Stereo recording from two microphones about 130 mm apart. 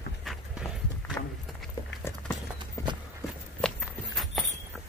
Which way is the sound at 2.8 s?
25° left (ahead or behind).